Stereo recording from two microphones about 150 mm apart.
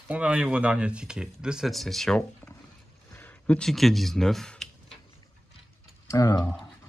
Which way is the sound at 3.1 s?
10° left (ahead or behind).